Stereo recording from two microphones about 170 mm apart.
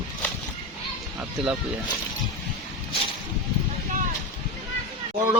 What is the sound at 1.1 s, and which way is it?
Speech, 5° right (ahead or behind).